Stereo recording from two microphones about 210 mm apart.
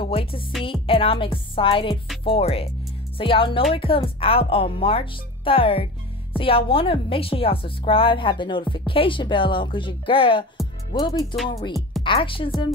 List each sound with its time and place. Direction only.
0.0 s music: 25° left (ahead or behind)
0.7 s a woman's voice: 25° left (ahead or behind)
10.9 s music: 20° left (ahead or behind)
11.4 s a woman's voice: 25° left (ahead or behind)